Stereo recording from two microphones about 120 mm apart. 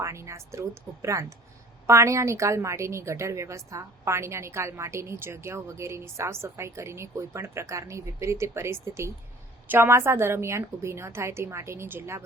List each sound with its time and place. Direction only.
0.0 s a woman's voice: 25° right (ahead or behind)